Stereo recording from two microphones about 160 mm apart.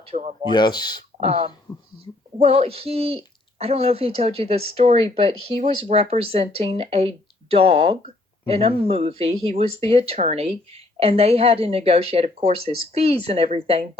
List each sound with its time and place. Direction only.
0.0 s speech: 45° right (ahead or behind)
0.4 s speech: 25° left (ahead or behind)
1.2 s speech: 35° right (ahead or behind)